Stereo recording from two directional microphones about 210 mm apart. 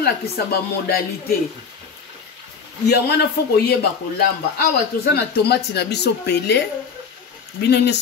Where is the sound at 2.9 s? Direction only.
50° left (ahead or behind).